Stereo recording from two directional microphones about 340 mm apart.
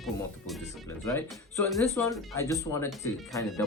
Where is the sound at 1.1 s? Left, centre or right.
Centre.